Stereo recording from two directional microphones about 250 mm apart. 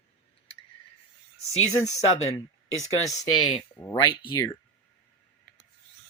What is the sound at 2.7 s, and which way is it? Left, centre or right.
Speech, centre.